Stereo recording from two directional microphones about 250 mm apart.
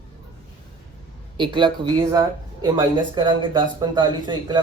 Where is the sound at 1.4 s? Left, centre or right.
Centre.